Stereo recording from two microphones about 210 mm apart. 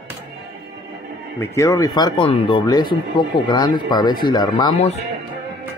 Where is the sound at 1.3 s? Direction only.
15° left (ahead or behind).